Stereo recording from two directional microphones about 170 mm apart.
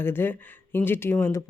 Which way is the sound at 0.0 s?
15° left (ahead or behind).